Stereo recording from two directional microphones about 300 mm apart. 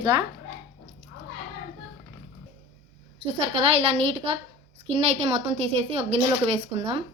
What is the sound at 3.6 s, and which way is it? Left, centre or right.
A woman's voice, centre.